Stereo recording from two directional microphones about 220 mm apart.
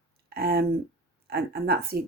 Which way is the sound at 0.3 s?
45° right (ahead or behind).